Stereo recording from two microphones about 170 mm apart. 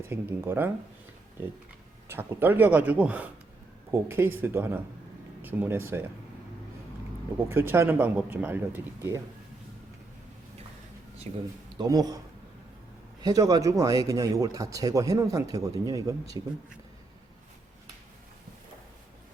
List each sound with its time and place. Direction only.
0.1 s speech: 15° right (ahead or behind)
2.0 s speech: 15° right (ahead or behind)
7.5 s speech: 15° right (ahead or behind)
11.3 s speech: 40° right (ahead or behind)
11.8 s speech: 20° right (ahead or behind)
13.2 s speech: 20° right (ahead or behind)